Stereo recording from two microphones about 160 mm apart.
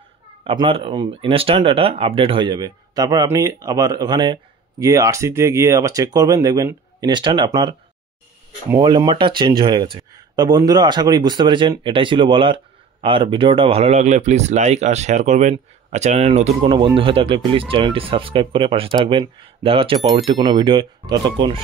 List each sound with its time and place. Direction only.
0.4 s speech: 35° right (ahead or behind)
8.7 s speech: 30° right (ahead or behind)